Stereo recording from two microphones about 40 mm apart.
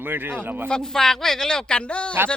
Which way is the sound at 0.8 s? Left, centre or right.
Centre.